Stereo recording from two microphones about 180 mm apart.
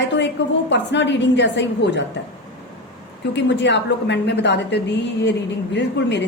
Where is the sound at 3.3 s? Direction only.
75° left (ahead or behind).